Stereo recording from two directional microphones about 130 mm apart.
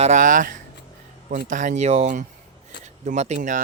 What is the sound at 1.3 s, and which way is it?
Speech, 75° right (ahead or behind).